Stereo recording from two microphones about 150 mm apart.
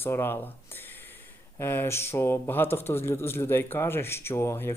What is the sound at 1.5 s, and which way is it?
Speech, 15° left (ahead or behind).